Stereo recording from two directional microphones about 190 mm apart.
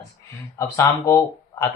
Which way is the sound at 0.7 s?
15° left (ahead or behind).